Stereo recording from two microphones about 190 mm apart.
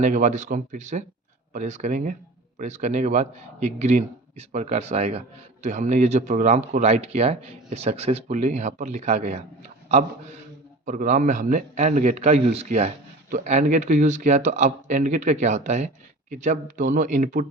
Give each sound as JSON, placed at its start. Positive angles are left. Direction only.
{"t": 0.0, "sound": "a man's voice", "side_deg": -40}